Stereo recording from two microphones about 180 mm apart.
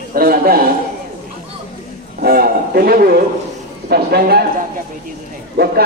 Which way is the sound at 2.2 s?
55° right (ahead or behind).